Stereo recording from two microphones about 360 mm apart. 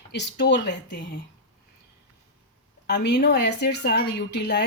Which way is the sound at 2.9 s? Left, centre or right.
Left.